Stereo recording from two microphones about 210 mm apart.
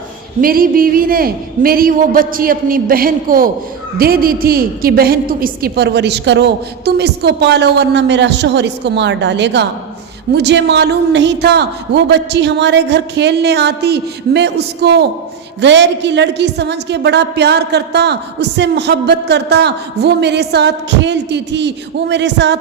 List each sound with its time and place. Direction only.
0.4 s a woman's voice: 45° right (ahead or behind)